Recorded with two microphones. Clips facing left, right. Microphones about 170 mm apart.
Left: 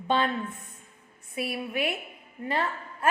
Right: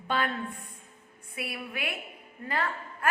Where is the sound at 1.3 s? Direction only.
25° left (ahead or behind).